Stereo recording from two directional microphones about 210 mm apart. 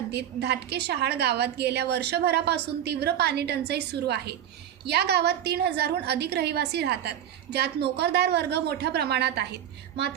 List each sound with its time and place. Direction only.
0.1 s a woman's voice: 50° right (ahead or behind)